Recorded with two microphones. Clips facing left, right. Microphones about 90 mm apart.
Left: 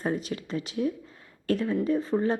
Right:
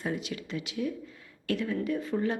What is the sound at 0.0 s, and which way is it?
A woman's voice, 40° left (ahead or behind).